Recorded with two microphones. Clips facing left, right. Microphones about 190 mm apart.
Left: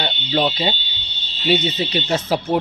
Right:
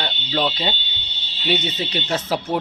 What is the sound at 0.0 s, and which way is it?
Fire alarm, 5° left (ahead or behind).